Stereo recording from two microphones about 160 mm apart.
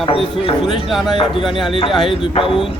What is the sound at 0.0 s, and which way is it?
Speech, 35° left (ahead or behind).